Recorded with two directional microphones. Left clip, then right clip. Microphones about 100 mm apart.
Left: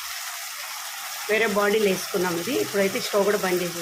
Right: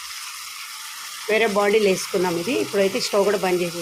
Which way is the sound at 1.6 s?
60° right (ahead or behind).